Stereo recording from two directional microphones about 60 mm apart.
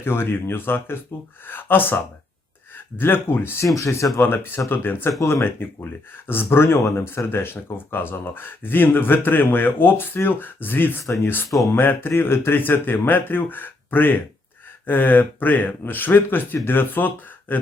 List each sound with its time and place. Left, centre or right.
0.0 s speech: left
3.8 s speech: left
4.2 s speech: left
5.2 s speech: left
5.5 s speech: left